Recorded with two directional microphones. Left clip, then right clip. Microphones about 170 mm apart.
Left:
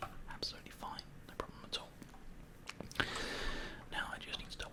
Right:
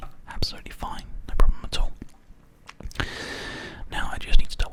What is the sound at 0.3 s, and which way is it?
Whispering, 35° right (ahead or behind).